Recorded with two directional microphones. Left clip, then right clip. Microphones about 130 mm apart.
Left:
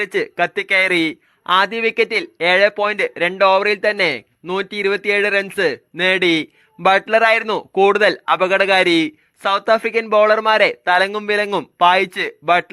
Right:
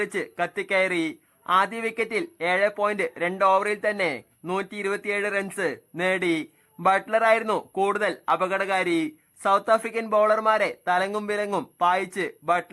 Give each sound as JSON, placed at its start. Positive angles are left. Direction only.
{"t": 0.0, "sound": "speech", "side_deg": 30}